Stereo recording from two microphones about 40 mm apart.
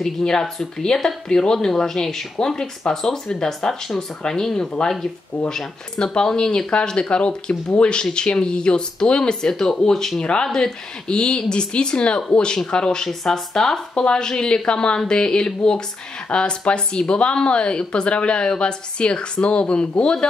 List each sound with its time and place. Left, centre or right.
0.0 s speech: centre
3.4 s speech: centre; by 20.2 s left